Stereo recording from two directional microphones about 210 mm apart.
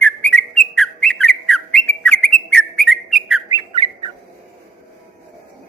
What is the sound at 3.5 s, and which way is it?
Bird, 20° right (ahead or behind).